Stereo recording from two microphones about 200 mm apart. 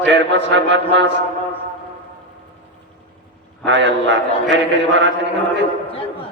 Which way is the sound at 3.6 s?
65° right (ahead or behind).